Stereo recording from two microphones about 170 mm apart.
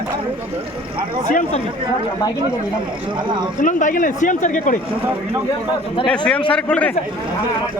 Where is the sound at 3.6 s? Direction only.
50° left (ahead or behind).